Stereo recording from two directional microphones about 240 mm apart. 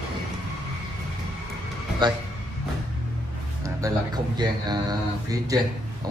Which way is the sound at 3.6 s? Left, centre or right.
Centre.